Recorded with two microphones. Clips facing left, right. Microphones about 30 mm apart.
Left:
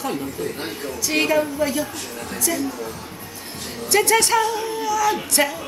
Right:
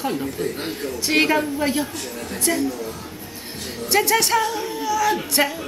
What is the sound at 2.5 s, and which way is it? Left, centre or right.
Speech, centre.